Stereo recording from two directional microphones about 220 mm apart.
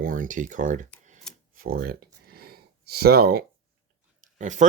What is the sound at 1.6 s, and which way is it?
Speech, 40° right (ahead or behind).